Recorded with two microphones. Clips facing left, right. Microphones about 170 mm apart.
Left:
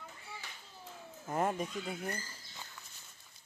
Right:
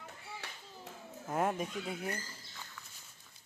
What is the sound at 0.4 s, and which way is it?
Clapping, 75° right (ahead or behind).